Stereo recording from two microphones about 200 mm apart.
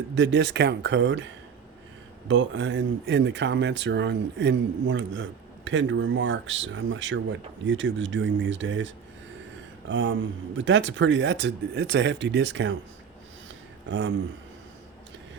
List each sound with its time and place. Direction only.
0.1 s speech: 65° right (ahead or behind)
9.9 s speech: 70° right (ahead or behind)
13.9 s speech: 65° right (ahead or behind)